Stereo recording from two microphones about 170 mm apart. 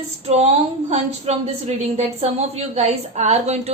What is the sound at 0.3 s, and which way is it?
A woman's voice, 40° right (ahead or behind).